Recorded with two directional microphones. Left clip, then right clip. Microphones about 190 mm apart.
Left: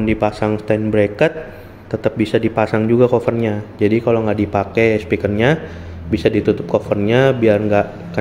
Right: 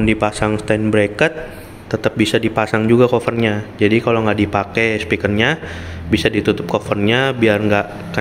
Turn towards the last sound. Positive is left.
turn(degrees=5)  # may be behind; listen again after turning